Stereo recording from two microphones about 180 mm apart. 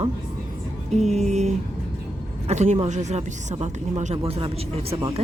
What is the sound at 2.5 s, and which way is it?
Speech, 35° right (ahead or behind).